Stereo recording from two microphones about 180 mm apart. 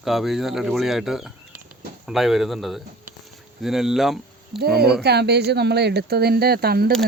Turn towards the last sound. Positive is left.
turn(degrees=-60)  # may be behind; listen again after turning